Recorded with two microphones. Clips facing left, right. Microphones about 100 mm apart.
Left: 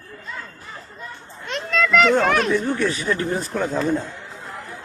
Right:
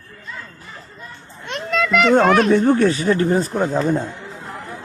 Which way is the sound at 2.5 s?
45° right (ahead or behind).